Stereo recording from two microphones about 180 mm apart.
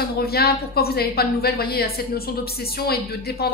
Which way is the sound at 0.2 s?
60° left (ahead or behind).